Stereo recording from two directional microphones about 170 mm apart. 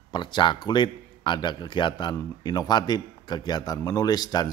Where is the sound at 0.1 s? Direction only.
25° left (ahead or behind).